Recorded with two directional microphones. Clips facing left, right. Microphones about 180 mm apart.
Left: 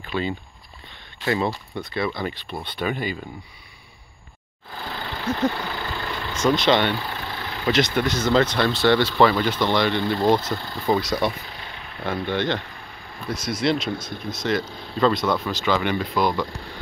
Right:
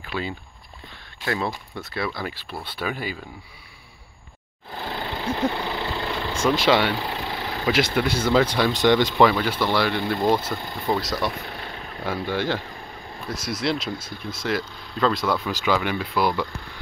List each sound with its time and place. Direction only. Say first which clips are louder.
0.0 s a sound: left 3 dB; 5° right (ahead or behind)
1.2 s speech: left 3 dB; centre (ahead or behind)
4.8 s engine: even; 20° right (ahead or behind)
5.6 s vehicle: right 2 dB; 25° right (ahead or behind)
6.4 s speech: left 1 dB; 10° right (ahead or behind)
7.0 s vehicle: right 2 dB; 25° right (ahead or behind)
7.6 s speech: left 1 dB; 10° right (ahead or behind)
12.0 s speech: left 1 dB; 5° right (ahead or behind)